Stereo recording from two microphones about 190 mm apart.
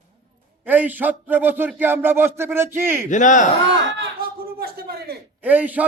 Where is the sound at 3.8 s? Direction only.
75° right (ahead or behind).